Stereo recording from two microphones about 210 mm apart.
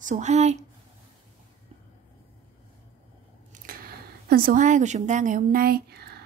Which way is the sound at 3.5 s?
40° right (ahead or behind).